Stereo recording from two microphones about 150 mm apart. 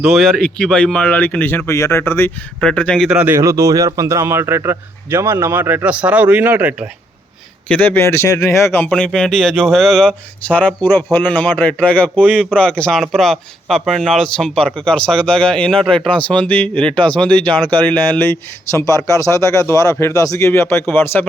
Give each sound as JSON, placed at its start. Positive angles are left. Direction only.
{"t": 0.2, "sound": "speech", "side_deg": 5}
{"t": 3.1, "sound": "a man's voice", "side_deg": -5}
{"t": 3.3, "sound": "a man's voice", "side_deg": -20}
{"t": 7.7, "sound": "speech", "side_deg": 10}
{"t": 8.9, "sound": "speech", "side_deg": 5}